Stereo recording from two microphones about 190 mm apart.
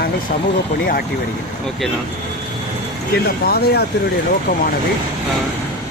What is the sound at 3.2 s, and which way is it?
Speech, 55° left (ahead or behind).